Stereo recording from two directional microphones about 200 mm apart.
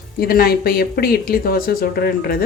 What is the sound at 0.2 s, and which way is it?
Speech, 50° left (ahead or behind).